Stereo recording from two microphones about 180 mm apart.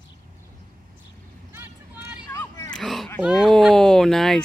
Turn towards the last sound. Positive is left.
turn(degrees=0)  # may be behind; listen again after turning